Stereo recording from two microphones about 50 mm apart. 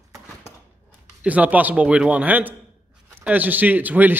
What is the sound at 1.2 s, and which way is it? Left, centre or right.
A man's voice, right.